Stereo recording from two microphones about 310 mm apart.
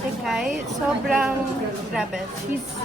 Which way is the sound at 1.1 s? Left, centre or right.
Centre.